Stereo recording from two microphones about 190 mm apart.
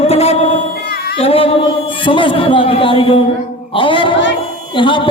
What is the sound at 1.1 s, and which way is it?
A man's voice, 30° left (ahead or behind).